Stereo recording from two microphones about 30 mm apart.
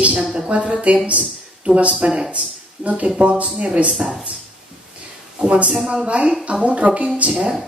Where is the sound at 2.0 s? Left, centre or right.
Right.